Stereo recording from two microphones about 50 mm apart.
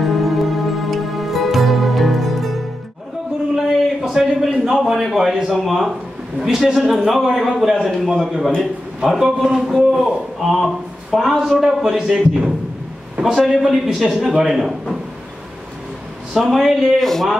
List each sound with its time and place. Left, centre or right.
0.2 s music: centre
3.5 s a sound: centre
4.6 s a man's voice: centre
13.6 s a man's voice: centre
16.3 s a man's voice: centre
17.0 s speech: centre